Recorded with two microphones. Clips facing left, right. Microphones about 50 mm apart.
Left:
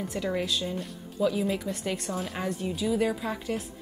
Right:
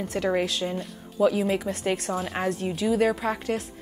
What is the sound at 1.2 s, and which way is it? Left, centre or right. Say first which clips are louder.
Speech: right 4 dB; right.